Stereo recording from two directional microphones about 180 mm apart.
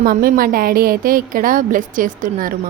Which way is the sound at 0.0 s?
55° right (ahead or behind).